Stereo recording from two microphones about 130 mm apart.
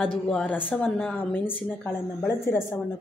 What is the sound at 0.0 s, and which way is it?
Speech, 10° left (ahead or behind).